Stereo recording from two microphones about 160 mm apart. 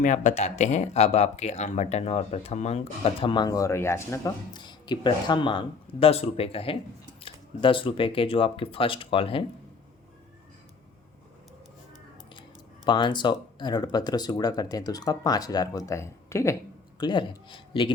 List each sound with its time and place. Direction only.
0.0 s speech: 50° left (ahead or behind); by 9.4 s 35° left (ahead or behind)
12.3 s speech: 30° left (ahead or behind)
17.0 s speech: 30° left (ahead or behind)